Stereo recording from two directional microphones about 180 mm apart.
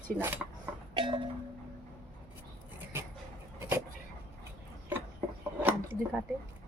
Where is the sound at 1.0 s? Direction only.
30° right (ahead or behind).